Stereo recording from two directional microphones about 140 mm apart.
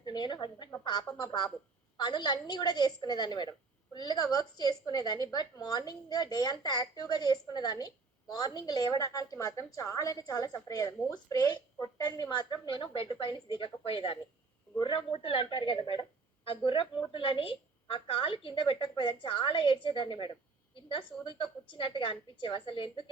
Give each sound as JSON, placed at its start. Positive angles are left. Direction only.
{"t": 0.0, "sound": "a woman's voice", "side_deg": 30}